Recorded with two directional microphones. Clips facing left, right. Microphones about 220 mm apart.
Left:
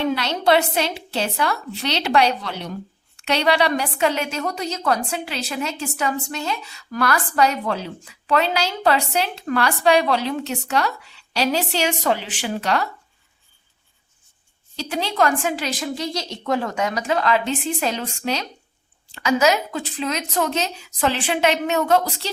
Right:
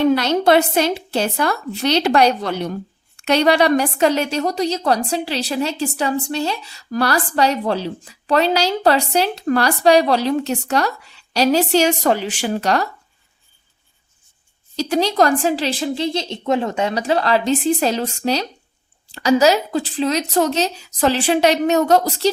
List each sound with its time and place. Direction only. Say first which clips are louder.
0.1 s a woman's voice: right 5 dB; 45° right (ahead or behind)
14.8 s a woman's voice: right 5 dB; 40° right (ahead or behind)